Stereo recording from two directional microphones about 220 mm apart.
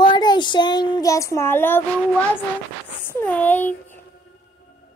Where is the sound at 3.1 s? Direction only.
10° left (ahead or behind).